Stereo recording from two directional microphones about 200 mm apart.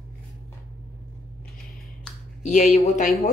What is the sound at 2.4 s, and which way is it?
Speech, 35° left (ahead or behind).